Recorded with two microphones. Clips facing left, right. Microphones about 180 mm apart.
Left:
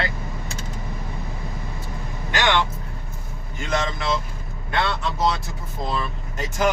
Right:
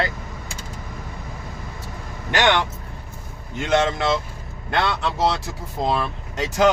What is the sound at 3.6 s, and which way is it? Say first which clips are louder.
Speech: right 6 dB; 70° right (ahead or behind).